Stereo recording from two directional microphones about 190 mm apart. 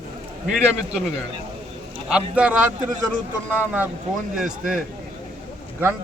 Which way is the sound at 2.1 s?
5° right (ahead or behind).